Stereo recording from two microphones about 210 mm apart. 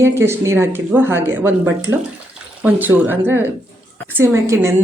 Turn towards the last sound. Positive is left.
turn(degrees=-10)  # may be behind; listen again after turning